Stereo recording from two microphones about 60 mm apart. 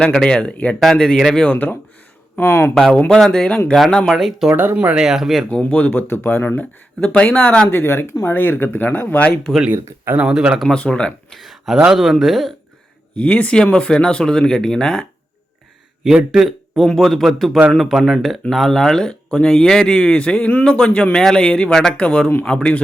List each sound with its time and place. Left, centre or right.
0.2 s speech: centre
0.9 s speech: centre
1.5 s speech: left
2.4 s speech: left
3.1 s a man's voice: centre
4.4 s speech: right
4.9 s a man's voice: centre
5.5 s speech: left
10.2 s speech: centre
10.8 s speech: centre
11.3 s a man's voice: centre
13.1 s speech: left
16.1 s a man's voice: centre
21.9 s speech: left